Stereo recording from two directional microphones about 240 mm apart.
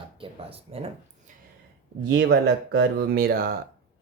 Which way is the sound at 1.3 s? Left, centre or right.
Right.